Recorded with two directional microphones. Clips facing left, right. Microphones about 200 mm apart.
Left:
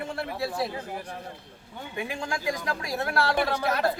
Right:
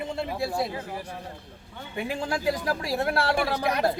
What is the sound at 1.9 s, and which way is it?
Speech, 35° right (ahead or behind).